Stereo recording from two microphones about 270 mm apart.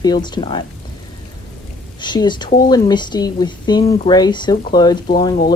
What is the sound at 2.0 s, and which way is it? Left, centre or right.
Speech, centre.